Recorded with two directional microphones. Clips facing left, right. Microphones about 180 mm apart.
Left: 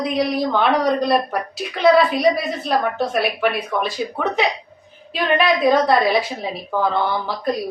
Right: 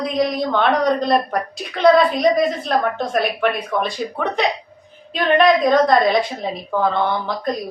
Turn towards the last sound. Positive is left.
turn(degrees=5)  # may be behind; listen again after turning